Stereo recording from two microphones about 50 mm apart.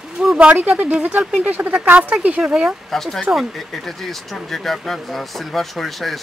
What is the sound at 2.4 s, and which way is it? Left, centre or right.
Speech, centre.